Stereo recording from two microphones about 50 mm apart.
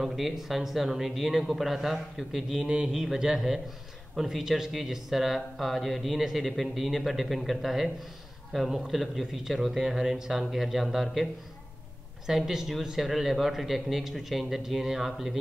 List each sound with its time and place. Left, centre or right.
0.0 s speech: centre
2.6 s speech: centre
12.3 s speech: centre